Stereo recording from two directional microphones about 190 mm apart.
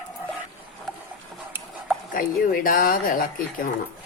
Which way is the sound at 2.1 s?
50° left (ahead or behind).